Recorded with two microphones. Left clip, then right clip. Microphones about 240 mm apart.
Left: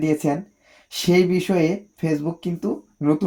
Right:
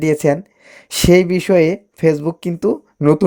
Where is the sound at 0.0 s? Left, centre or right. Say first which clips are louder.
Right 7 dB; right.